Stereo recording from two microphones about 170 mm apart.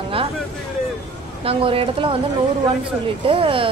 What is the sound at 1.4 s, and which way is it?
Speech, 35° right (ahead or behind).